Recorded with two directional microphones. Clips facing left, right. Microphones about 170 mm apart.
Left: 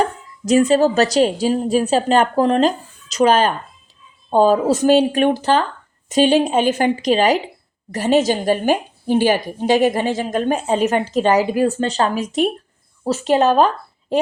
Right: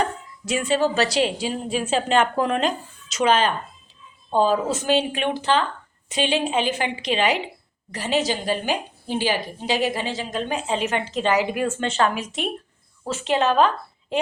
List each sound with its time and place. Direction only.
0.0 s a woman's voice: 40° left (ahead or behind)